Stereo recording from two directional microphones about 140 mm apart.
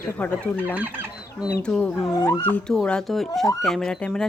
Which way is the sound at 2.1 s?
25° left (ahead or behind).